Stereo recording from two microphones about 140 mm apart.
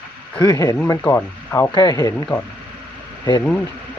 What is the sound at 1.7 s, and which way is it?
Speech, 30° left (ahead or behind).